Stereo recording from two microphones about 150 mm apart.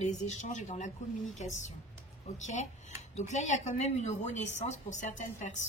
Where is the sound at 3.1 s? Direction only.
50° left (ahead or behind).